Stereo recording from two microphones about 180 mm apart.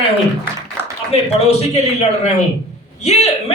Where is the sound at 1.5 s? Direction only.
35° left (ahead or behind).